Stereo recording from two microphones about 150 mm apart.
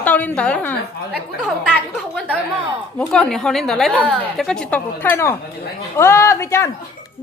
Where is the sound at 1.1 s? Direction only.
5° right (ahead or behind).